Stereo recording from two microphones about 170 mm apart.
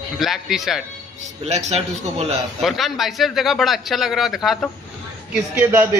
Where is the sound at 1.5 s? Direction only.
40° right (ahead or behind).